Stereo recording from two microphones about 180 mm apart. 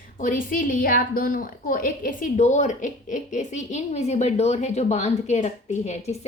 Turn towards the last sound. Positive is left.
turn(degrees=40)  # may be behind; listen again after turning